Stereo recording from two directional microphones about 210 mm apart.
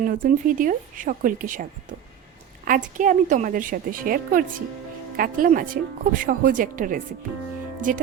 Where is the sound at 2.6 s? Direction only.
40° right (ahead or behind).